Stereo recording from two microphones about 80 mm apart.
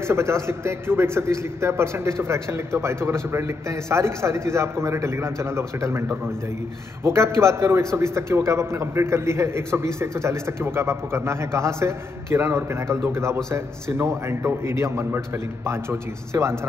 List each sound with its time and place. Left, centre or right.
0.0 s a man's voice: right